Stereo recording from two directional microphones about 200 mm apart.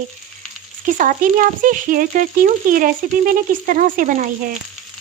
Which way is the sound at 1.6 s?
40° right (ahead or behind).